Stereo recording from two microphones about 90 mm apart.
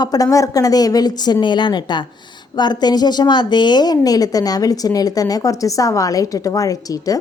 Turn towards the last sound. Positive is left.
turn(degrees=40)  # may be behind; listen again after turning